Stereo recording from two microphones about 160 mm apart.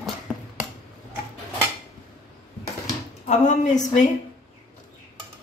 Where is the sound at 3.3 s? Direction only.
50° left (ahead or behind).